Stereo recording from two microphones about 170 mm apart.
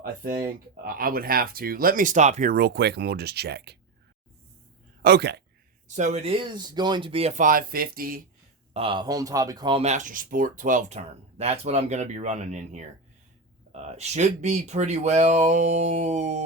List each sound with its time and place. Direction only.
0.0 s speech: 60° right (ahead or behind)
2.6 s speech: 75° right (ahead or behind)
5.0 s speech: 75° right (ahead or behind)
5.9 s speech: 45° right (ahead or behind)
6.4 s speech: 25° right (ahead or behind); by 8.2 s 60° right (ahead or behind)
8.7 s speech: 30° right (ahead or behind)
9.8 s speech: 45° right (ahead or behind)
13.9 s speech: 40° right (ahead or behind)